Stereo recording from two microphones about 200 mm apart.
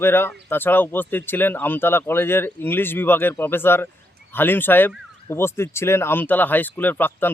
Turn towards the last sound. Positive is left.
turn(degrees=10)  # may be behind; listen again after turning